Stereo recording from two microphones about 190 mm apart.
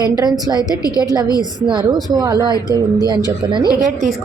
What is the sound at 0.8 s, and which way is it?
Speech, 20° left (ahead or behind).